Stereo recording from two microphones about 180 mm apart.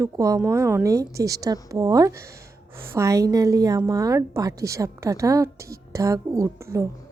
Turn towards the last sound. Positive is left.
turn(degrees=-15)  # may be behind; listen again after turning